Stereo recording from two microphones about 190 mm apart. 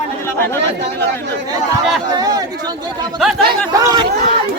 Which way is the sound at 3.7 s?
20° right (ahead or behind).